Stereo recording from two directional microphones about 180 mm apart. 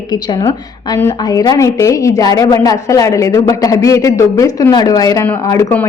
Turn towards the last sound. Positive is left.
turn(degrees=15)  # may be behind; listen again after turning